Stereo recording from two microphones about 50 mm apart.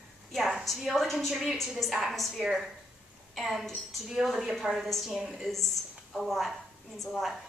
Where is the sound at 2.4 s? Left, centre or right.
Centre.